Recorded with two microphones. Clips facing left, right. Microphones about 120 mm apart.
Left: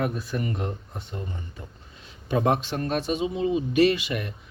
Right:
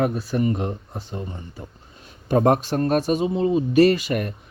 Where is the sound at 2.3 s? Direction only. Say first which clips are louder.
Right 5 dB; 45° right (ahead or behind).